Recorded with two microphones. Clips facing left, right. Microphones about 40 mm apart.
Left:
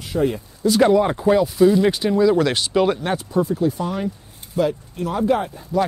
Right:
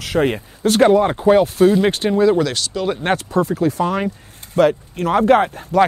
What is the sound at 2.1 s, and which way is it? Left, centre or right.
Speech, right.